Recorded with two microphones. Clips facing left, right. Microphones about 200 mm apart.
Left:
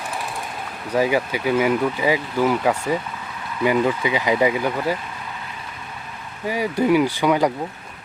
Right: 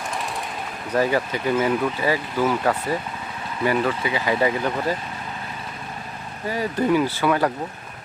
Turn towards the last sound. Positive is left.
turn(degrees=15)  # may be behind; listen again after turning